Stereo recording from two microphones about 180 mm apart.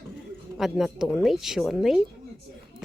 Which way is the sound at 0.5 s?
Centre (ahead or behind).